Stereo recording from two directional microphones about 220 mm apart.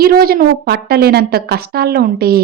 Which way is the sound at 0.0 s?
45° right (ahead or behind).